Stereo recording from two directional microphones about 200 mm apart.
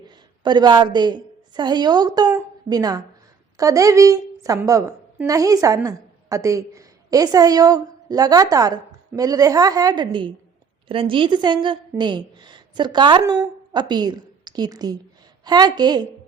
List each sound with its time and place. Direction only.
0.4 s a woman's voice: 20° right (ahead or behind)